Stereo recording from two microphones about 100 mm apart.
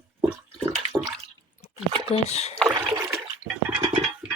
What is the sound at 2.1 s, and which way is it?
Speech, 90° left.